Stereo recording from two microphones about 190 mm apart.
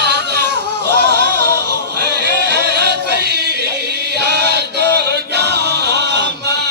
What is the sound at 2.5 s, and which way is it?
Music, 60° right (ahead or behind).